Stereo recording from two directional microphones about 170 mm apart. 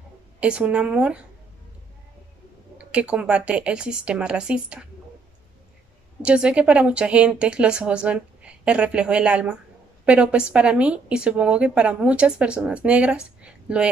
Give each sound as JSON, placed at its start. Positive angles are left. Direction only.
{"t": 0.4, "sound": "a woman's voice", "side_deg": -5}
{"t": 2.8, "sound": "a woman's voice", "side_deg": -5}
{"t": 6.2, "sound": "a woman's voice", "side_deg": -5}